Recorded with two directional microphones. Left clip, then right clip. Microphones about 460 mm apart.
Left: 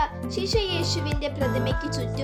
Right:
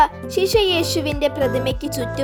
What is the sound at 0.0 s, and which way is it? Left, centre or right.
Speech, centre.